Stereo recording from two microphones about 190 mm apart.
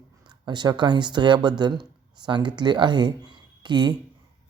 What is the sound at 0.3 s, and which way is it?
Speech, 25° right (ahead or behind).